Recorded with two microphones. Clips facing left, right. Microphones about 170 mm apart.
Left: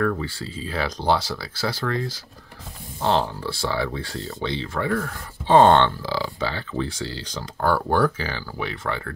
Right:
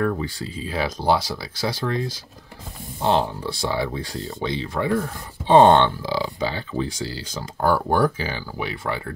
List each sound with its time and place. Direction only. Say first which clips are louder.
0.0 s speech: even; 20° right (ahead or behind)